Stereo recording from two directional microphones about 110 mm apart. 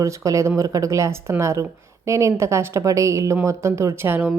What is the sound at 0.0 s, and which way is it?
A woman's voice, 30° right (ahead or behind).